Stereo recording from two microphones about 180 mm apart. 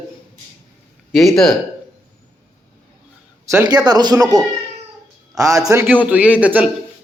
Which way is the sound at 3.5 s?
15° right (ahead or behind).